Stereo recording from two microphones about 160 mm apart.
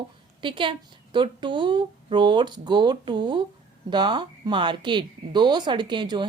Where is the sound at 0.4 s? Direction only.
30° right (ahead or behind).